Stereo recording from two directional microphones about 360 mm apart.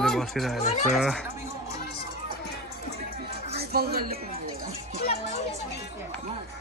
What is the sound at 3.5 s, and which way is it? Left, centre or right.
Speech, right.